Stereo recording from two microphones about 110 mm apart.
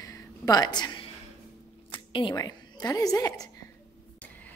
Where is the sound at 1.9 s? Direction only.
50° left (ahead or behind).